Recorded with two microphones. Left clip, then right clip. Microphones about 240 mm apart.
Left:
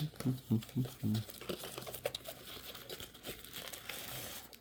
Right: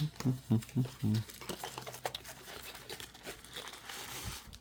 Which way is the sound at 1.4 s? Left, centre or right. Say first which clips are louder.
Even; centre.